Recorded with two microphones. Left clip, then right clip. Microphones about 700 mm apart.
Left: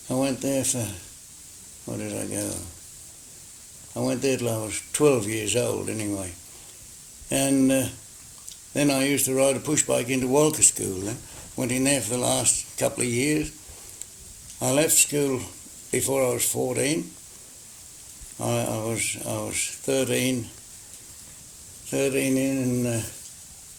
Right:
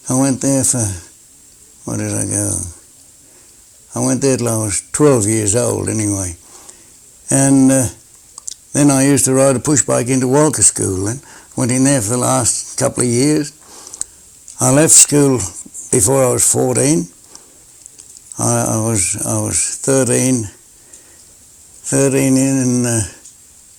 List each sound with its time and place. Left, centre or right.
0.1 s speech: right
1.9 s speech: right
3.9 s speech: right
7.3 s speech: right
14.6 s speech: right
18.3 s speech: right
21.8 s speech: right